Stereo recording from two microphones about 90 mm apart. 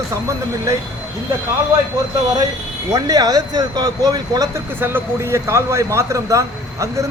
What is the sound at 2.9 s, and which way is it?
Speech, 40° right (ahead or behind).